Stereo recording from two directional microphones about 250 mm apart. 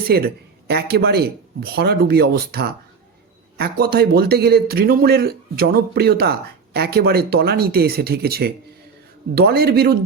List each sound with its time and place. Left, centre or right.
0.1 s a man's voice: right